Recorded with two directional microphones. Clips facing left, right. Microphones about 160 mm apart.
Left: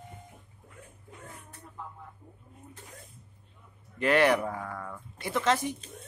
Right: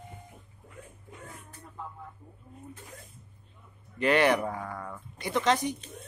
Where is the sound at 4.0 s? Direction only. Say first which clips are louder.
Even; centre (ahead or behind).